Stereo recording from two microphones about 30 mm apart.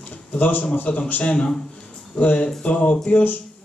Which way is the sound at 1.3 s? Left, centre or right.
Left.